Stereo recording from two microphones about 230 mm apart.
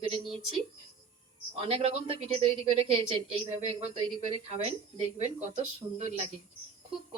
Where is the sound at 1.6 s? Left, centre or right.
Right.